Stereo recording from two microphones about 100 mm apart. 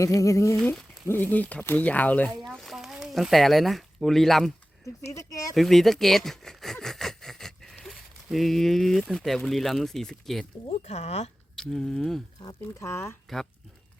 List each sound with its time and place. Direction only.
0.0 s speech: 35° left (ahead or behind)
0.6 s speech: 5° left (ahead or behind)
1.0 s speech: 20° left (ahead or behind)
2.5 s a sound: centre (ahead or behind)
5.1 s speech: 35° left (ahead or behind)
5.5 s speech: centre (ahead or behind)
10.7 s speech: 90° left
11.5 s speech: 5° left (ahead or behind)
12.8 s speech: 25° left (ahead or behind)